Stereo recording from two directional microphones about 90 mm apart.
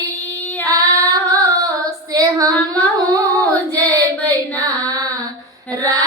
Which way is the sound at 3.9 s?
40° right (ahead or behind).